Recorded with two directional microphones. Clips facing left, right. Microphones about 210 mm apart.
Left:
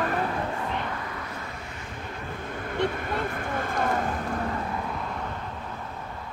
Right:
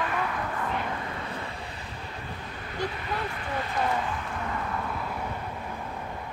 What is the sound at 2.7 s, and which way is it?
Speech, 50° left (ahead or behind).